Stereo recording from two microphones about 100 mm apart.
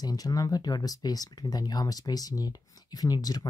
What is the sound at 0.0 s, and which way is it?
Speech, 40° left (ahead or behind).